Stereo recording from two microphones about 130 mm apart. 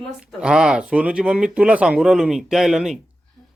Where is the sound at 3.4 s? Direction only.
25° left (ahead or behind).